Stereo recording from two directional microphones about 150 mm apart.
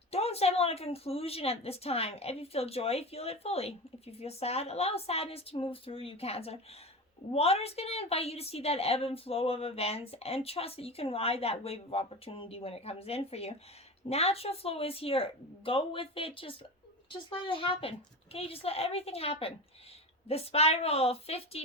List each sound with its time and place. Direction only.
0.1 s a woman's voice: 45° left (ahead or behind)